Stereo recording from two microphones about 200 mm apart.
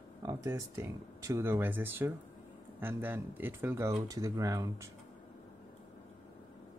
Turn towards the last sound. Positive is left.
turn(degrees=-15)  # may be behind; listen again after turning